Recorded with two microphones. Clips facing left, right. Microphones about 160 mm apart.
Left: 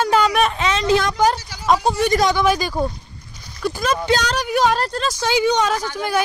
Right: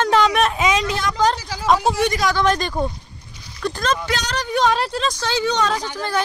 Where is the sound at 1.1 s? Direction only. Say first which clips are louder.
Left 1 dB; 5° left (ahead or behind).